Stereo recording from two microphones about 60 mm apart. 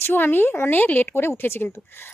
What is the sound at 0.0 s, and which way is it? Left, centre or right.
Speech, left.